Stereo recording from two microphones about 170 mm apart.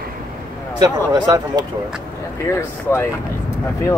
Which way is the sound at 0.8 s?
20° right (ahead or behind).